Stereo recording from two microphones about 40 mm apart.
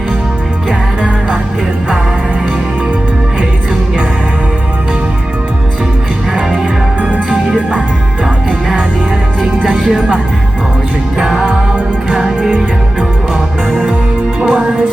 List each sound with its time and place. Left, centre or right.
7.0 s music: right
9.6 s music: right
11.2 s music: centre
13.7 s music: right